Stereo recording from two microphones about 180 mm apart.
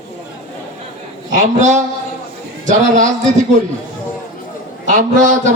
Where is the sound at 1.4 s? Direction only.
40° right (ahead or behind).